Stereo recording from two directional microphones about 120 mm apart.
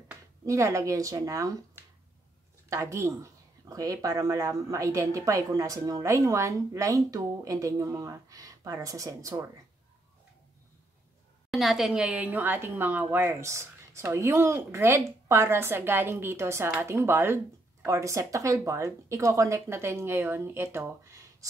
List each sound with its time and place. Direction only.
0.5 s speech: 25° right (ahead or behind)
2.7 s speech: 25° right (ahead or behind)
11.5 s speech: centre (ahead or behind); by 21.5 s 25° right (ahead or behind)